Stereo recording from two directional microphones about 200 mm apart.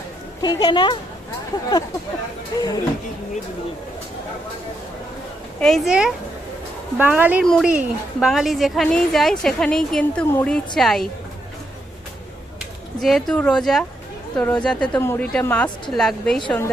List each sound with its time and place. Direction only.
0.4 s speech: 20° left (ahead or behind)
2.6 s speech: 20° left (ahead or behind)
5.5 s a woman's voice: 5° left (ahead or behind)
13.0 s a woman's voice: centre (ahead or behind)